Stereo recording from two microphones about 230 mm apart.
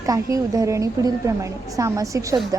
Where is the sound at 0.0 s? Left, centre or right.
Centre.